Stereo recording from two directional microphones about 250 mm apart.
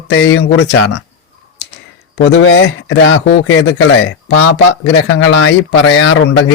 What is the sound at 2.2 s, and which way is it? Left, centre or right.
Speech, left.